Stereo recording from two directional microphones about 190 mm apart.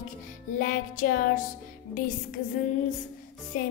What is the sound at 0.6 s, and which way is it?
Music, 45° left (ahead or behind).